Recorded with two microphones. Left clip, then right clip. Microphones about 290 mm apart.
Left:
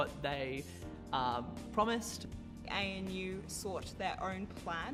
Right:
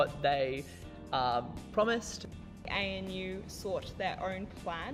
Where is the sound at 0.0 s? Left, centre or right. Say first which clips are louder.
Right 8 dB; right.